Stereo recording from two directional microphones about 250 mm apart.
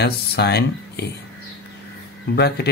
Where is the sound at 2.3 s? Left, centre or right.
Left.